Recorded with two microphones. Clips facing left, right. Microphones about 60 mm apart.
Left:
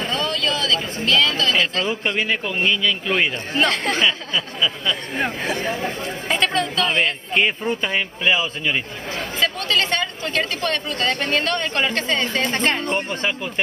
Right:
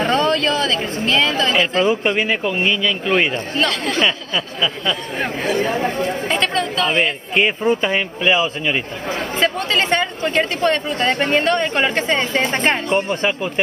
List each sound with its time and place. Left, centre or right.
0.0 s speech: right; by 3.3 s centre
3.7 s speech: left
4.6 s speech: centre
5.6 s speech: right
6.2 s speech: centre
9.4 s speech: right
12.9 s speech: centre